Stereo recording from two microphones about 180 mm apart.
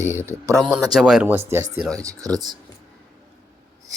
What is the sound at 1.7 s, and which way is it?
Speech, centre (ahead or behind).